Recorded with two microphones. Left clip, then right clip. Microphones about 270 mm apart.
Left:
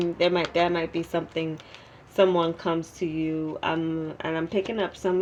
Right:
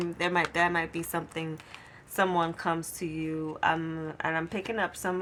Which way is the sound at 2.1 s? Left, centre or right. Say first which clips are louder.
Left 6 dB; right.